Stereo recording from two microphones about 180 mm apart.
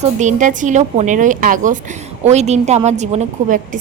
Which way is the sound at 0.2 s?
45° right (ahead or behind).